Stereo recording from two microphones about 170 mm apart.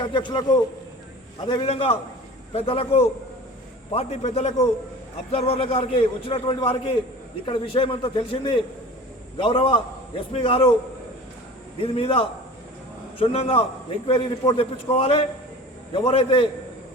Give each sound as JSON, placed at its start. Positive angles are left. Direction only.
{"t": 0.1, "sound": "a man's voice", "side_deg": 25}
{"t": 11.8, "sound": "a man's voice", "side_deg": 35}